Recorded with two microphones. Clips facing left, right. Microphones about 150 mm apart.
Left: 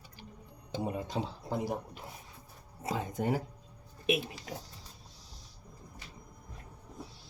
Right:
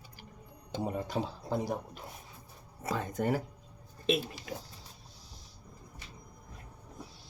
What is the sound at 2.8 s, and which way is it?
Speech, 20° left (ahead or behind).